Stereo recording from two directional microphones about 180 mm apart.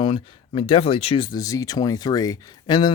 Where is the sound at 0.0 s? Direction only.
30° left (ahead or behind).